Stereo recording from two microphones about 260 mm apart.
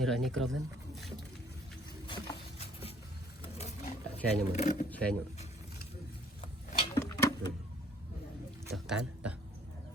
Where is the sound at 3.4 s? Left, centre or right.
Left.